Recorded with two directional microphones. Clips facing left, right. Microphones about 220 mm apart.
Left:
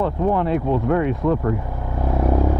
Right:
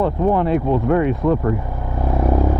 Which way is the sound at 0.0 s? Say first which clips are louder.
Right 3 dB; 15° right (ahead or behind).